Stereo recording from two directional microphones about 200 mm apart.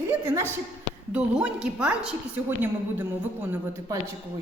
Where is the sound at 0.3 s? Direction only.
15° right (ahead or behind).